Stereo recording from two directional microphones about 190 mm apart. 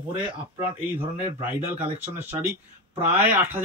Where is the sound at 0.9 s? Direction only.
10° right (ahead or behind).